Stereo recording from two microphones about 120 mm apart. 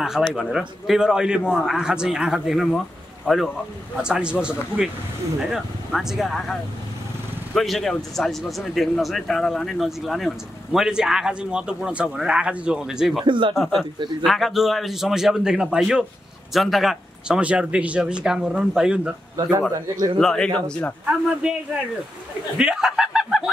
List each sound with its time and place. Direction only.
0.3 s a man's voice: centre (ahead or behind)
7.5 s a man's voice: centre (ahead or behind)
13.2 s speech: 40° right (ahead or behind)
13.6 s a man's voice: centre (ahead or behind)
20.2 s a man's voice: 5° left (ahead or behind)
21.0 s speech: 10° right (ahead or behind)
22.6 s speech: 5° right (ahead or behind)